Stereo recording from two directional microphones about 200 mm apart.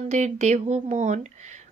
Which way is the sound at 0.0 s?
35° right (ahead or behind).